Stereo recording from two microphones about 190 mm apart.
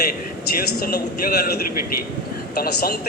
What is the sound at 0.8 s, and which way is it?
Speech, 50° left (ahead or behind).